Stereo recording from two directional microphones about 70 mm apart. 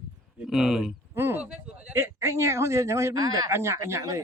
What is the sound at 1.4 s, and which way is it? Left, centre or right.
Speech, centre.